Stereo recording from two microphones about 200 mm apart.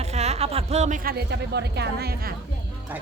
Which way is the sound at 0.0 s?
35° right (ahead or behind).